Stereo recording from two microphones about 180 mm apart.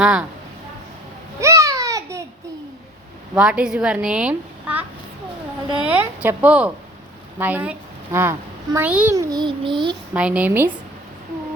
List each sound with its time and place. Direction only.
0.0 s a woman's voice: 5° right (ahead or behind)
1.4 s babbling: 15° right (ahead or behind)
3.3 s a woman's voice: 5° right (ahead or behind)
9.1 s child singing: 20° right (ahead or behind)
10.2 s a woman's voice: 5° right (ahead or behind)